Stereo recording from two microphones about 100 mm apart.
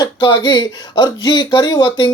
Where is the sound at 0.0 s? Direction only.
50° left (ahead or behind).